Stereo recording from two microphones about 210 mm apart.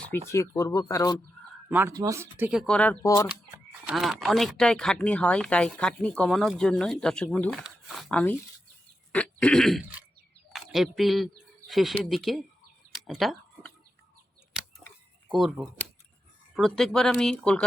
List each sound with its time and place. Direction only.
0.1 s speech: 15° left (ahead or behind)
1.7 s speech: 15° right (ahead or behind); by 8.4 s 5° left (ahead or behind)
9.1 s throat clearing: 5° left (ahead or behind)
10.5 s speech: centre (ahead or behind)
12.9 s chicken: centre (ahead or behind)
14.8 s a sound: centre (ahead or behind)
16.6 s speech: centre (ahead or behind)